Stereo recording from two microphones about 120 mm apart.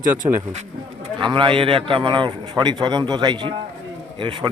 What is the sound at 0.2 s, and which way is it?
A man's voice, 45° right (ahead or behind).